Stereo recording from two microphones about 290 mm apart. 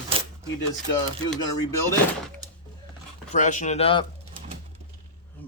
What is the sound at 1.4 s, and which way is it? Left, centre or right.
Speech, centre.